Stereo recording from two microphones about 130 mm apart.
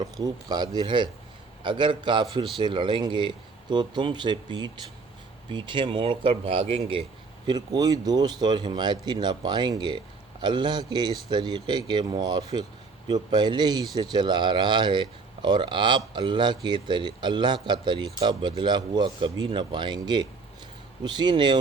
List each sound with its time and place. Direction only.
0.0 s speech: 30° right (ahead or behind); by 7.0 s 45° right (ahead or behind)
7.4 s speech: 30° right (ahead or behind)